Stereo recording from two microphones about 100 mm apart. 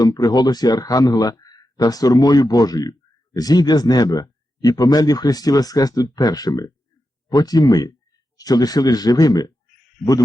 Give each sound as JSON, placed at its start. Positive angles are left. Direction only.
{"t": 0.0, "sound": "speech", "side_deg": 40}
{"t": 10.0, "sound": "speech", "side_deg": 5}